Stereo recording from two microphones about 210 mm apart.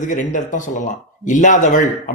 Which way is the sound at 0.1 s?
35° left (ahead or behind).